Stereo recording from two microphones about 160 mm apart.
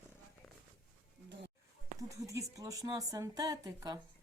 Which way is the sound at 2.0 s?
20° right (ahead or behind).